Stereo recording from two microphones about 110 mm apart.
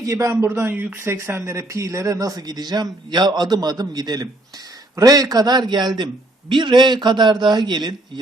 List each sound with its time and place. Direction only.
0.0 s a man's voice: 30° right (ahead or behind)